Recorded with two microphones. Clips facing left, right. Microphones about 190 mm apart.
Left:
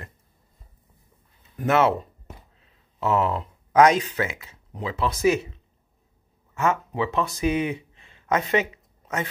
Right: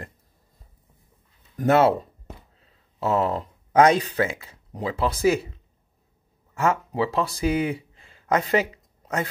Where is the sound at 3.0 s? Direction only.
30° right (ahead or behind).